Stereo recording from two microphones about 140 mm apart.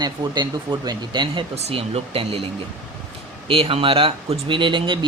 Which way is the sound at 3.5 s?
40° right (ahead or behind).